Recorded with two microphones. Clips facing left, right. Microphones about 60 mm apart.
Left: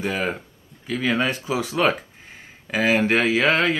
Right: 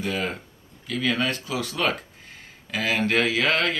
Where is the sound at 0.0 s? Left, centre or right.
Left.